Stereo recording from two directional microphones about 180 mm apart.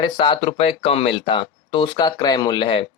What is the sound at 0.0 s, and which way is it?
Speech, 25° left (ahead or behind).